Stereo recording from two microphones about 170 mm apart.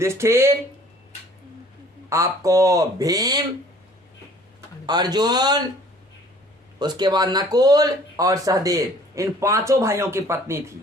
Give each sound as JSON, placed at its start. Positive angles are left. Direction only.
{"t": 0.0, "sound": "speech", "side_deg": -15}
{"t": 2.0, "sound": "speech", "side_deg": -20}
{"t": 4.9, "sound": "speech", "side_deg": -25}
{"t": 6.7, "sound": "speech", "side_deg": -25}